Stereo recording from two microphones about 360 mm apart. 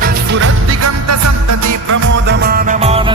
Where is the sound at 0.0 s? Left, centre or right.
Right.